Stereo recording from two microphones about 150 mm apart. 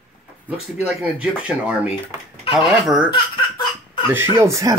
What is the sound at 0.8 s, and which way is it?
Speech, 10° right (ahead or behind).